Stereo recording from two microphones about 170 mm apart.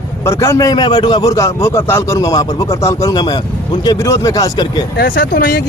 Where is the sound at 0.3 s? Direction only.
15° left (ahead or behind).